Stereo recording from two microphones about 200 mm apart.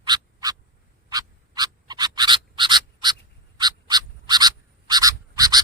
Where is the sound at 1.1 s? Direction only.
20° right (ahead or behind).